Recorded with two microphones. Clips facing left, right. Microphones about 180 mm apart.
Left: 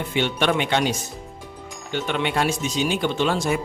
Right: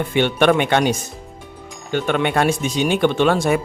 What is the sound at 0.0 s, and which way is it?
Speech, 55° right (ahead or behind).